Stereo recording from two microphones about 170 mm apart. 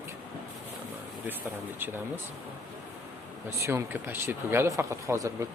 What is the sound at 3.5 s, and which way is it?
Speech, 15° right (ahead or behind).